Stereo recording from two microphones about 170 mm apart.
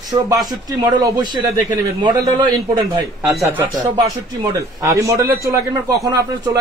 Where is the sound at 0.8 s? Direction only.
25° right (ahead or behind).